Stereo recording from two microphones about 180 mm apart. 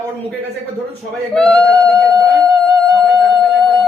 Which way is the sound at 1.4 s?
5° left (ahead or behind).